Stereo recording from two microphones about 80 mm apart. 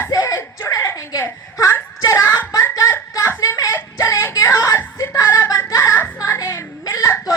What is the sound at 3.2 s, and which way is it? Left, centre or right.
Whimper, left.